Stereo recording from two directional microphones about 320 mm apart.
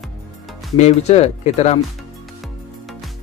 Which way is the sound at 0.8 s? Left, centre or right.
Left.